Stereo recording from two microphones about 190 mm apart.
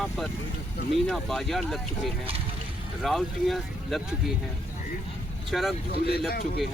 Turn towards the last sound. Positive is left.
turn(degrees=55)  # may be behind; listen again after turning